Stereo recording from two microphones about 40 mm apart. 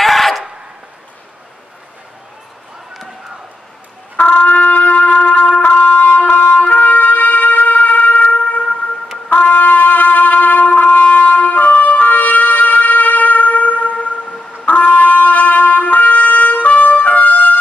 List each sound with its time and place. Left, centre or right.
0.0 s a sound: centre
4.2 s trumpet: left
9.3 s music: left
14.7 s wind instrument: left